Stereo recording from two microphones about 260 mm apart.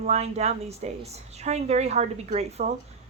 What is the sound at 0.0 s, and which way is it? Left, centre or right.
Speech, right.